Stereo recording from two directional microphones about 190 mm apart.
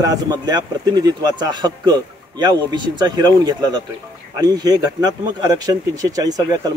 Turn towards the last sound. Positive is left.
turn(degrees=-20)  # may be behind; listen again after turning